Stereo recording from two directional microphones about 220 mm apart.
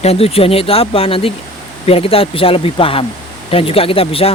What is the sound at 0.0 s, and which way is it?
Speech, 25° left (ahead or behind).